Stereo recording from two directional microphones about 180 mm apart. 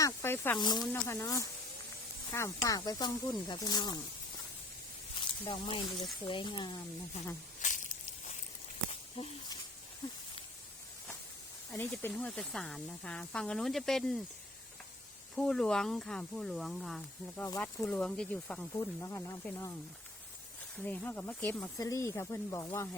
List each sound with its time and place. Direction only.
0.0 s speech: 15° left (ahead or behind)
5.1 s speech: 25° left (ahead or behind)
7.6 s a sound: 45° left (ahead or behind)
11.7 s speech: 10° left (ahead or behind)
15.4 s speech: 5° left (ahead or behind)
17.3 s speech: 15° left (ahead or behind)
18.7 s speech: 15° left (ahead or behind)
20.7 s speech: 10° left (ahead or behind)